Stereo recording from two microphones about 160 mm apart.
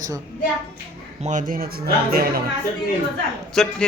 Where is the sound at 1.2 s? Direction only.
55° right (ahead or behind); by 2.4 s 70° right (ahead or behind).